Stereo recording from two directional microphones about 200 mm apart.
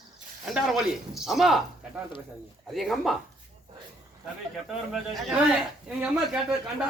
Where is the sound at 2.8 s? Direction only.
Centre (ahead or behind).